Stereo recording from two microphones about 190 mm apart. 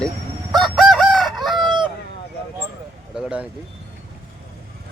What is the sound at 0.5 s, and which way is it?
Chicken, centre (ahead or behind).